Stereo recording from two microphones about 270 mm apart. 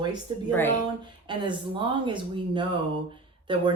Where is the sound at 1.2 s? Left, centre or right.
Centre.